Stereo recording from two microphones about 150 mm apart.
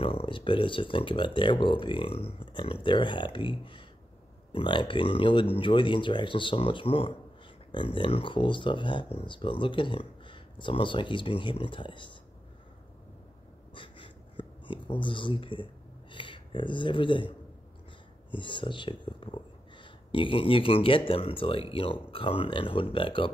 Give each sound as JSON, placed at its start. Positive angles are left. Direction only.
{"t": 0.0, "sound": "speech", "side_deg": 35}
{"t": 13.7, "sound": "a sound", "side_deg": 35}
{"t": 18.3, "sound": "speech", "side_deg": 35}